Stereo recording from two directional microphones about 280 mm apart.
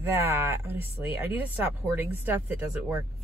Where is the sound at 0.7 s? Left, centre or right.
Left.